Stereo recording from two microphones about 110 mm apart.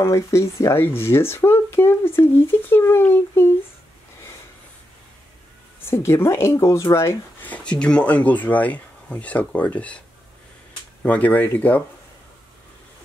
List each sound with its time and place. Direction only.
0.0 s speech: 25° left (ahead or behind)
5.9 s speech: 25° left (ahead or behind)
7.4 s speech: 10° left (ahead or behind)